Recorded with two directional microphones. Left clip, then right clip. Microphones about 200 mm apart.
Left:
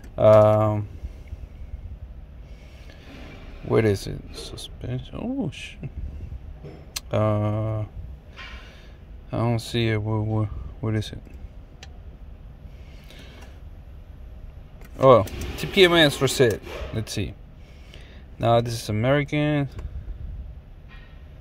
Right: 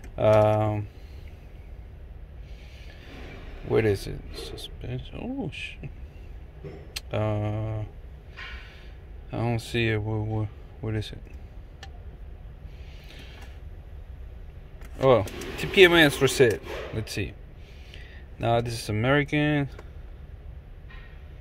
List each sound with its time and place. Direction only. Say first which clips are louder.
0.1 s speech: left 5 dB; 20° left (ahead or behind)
3.6 s speech: left 2 dB; 25° left (ahead or behind)
6.9 s speech: left 6 dB; 25° left (ahead or behind)
9.3 s speech: left 3 dB; 20° left (ahead or behind)
13.1 s a sound: left 1 dB; 25° left (ahead or behind)
15.0 s speech: left 5 dB; 25° left (ahead or behind)
17.9 s a sound: left 2 dB; 25° left (ahead or behind)
18.9 s speech: left 1 dB; 15° left (ahead or behind)